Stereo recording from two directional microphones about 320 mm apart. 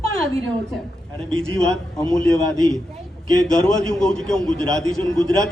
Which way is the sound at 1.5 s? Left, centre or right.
Centre.